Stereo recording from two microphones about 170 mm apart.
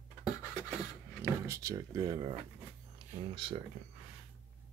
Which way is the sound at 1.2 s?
15° right (ahead or behind).